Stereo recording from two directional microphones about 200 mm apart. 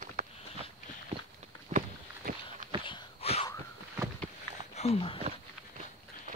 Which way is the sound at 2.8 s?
30° left (ahead or behind).